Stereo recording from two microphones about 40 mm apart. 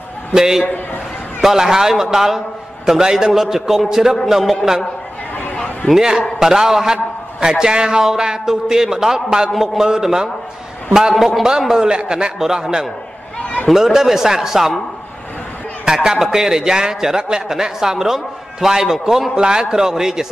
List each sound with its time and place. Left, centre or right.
0.3 s a man's voice: centre
5.9 s a man's voice: centre
12.4 s a man's voice: centre
15.8 s a man's voice: centre
19.3 s a man's voice: centre